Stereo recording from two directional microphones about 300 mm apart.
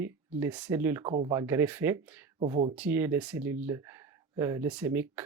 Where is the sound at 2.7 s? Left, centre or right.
Centre.